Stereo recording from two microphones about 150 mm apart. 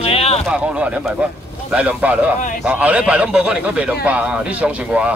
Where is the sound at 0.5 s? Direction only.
5° right (ahead or behind).